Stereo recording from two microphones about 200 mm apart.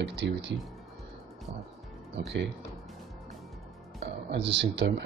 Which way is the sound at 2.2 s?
60° right (ahead or behind).